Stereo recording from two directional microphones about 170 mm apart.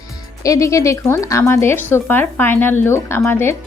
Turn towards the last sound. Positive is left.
turn(degrees=15)  # may be behind; listen again after turning